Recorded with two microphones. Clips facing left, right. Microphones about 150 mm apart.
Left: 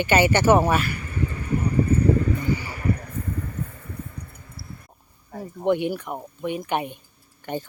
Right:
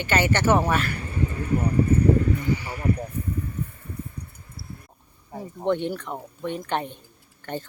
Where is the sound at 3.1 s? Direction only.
90° left.